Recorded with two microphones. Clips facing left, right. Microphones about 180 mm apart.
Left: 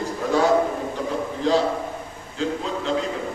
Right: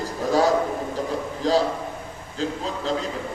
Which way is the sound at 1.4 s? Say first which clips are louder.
Even; 35° right (ahead or behind).